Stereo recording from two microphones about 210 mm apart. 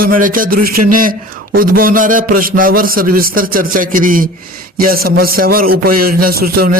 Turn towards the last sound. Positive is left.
turn(degrees=-45)  # may be behind; listen again after turning